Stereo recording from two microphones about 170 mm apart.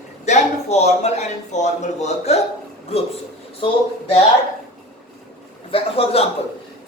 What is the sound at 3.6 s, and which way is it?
Speech, 35° left (ahead or behind).